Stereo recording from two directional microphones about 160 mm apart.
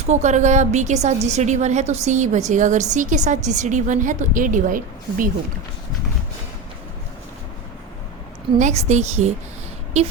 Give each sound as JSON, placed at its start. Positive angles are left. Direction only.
{"t": 0.1, "sound": "a woman's voice", "side_deg": -45}
{"t": 8.5, "sound": "a woman's voice", "side_deg": -45}